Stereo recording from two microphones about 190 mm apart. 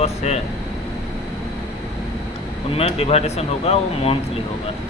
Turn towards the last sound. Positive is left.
turn(degrees=30)  # may be behind; listen again after turning